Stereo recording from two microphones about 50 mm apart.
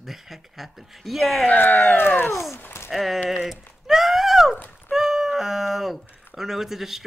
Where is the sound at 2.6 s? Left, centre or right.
Left.